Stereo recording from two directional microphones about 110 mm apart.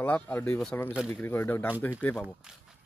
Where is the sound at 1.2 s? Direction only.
20° left (ahead or behind).